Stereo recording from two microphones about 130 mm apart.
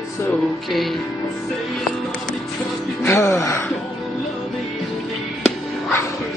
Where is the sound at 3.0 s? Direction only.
20° left (ahead or behind).